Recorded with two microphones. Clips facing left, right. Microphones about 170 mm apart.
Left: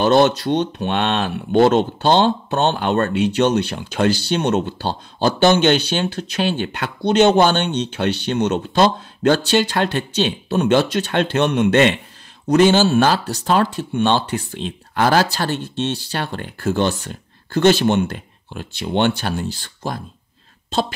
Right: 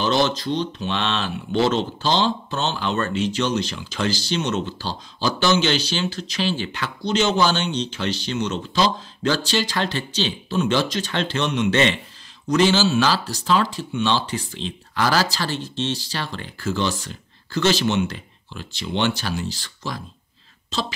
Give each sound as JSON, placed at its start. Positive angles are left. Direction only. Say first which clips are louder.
{"t": 0.0, "sound": "speech", "louder": "left 6 dB", "side_deg": 60}